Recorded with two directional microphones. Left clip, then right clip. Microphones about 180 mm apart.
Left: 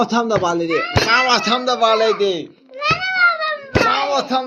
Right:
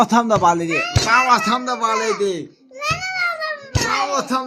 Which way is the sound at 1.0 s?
40° right (ahead or behind).